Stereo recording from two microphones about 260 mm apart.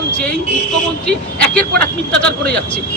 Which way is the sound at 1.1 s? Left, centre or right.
Centre.